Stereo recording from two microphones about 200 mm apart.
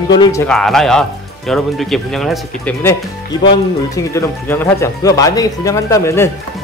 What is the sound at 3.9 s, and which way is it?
Speech, 15° left (ahead or behind).